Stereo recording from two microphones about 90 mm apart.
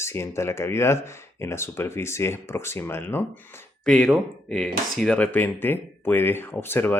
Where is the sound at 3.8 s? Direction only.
10° left (ahead or behind).